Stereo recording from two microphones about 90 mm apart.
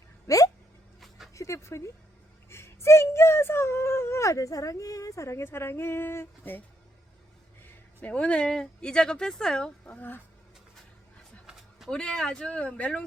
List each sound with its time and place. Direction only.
0.3 s hiccup: 40° left (ahead or behind)
1.3 s speech: 35° left (ahead or behind)
7.6 s speech: 15° left (ahead or behind)
11.9 s speech: 10° left (ahead or behind)